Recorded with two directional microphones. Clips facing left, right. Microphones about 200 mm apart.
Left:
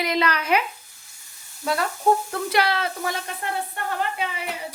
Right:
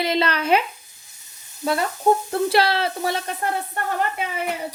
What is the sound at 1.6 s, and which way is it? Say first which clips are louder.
Speech: right 2 dB; 20° right (ahead or behind).